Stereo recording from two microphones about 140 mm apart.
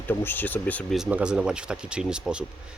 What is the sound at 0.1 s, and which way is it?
Speech, 15° left (ahead or behind).